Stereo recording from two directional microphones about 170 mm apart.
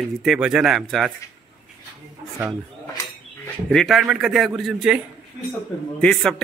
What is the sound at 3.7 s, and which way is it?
A man's voice, centre (ahead or behind).